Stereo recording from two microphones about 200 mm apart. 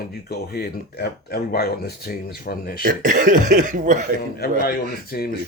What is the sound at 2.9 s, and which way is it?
Speech, 40° right (ahead or behind).